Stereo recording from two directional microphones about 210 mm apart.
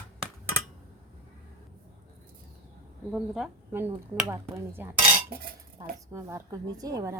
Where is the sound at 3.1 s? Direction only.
5° right (ahead or behind).